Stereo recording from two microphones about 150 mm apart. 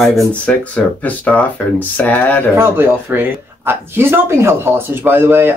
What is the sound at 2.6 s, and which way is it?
Speech, 15° right (ahead or behind).